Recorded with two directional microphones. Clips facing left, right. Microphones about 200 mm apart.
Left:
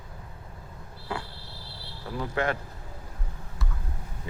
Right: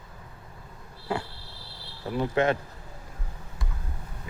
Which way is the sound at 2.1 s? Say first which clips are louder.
Right 4 dB; 20° right (ahead or behind).